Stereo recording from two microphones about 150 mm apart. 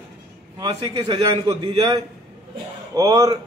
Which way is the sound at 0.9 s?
40° right (ahead or behind).